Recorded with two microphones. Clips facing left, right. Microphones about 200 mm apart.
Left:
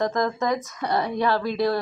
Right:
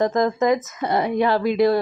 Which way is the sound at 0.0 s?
20° right (ahead or behind).